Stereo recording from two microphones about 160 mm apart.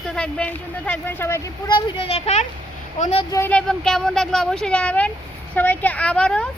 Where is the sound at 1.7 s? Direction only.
30° left (ahead or behind).